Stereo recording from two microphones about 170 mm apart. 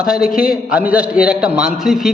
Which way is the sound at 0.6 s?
5° right (ahead or behind).